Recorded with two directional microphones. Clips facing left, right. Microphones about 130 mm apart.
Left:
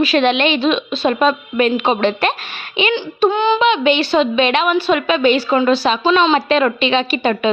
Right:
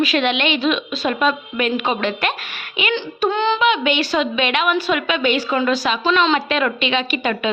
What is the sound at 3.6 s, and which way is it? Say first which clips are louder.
A woman's voice: left 4 dB; 30° left (ahead or behind).